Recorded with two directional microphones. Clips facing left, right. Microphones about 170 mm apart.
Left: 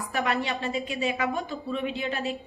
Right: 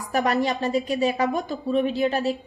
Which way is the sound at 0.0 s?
40° right (ahead or behind).